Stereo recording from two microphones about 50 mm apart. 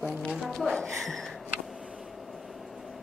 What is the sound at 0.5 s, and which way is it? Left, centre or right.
Speech, centre.